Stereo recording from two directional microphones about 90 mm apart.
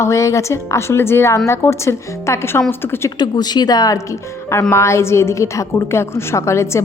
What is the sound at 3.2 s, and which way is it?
A woman's voice, 50° left (ahead or behind).